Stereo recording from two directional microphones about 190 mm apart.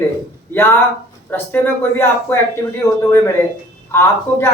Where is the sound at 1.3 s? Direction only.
10° left (ahead or behind).